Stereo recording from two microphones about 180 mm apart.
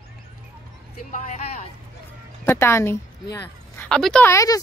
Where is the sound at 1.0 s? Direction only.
45° left (ahead or behind).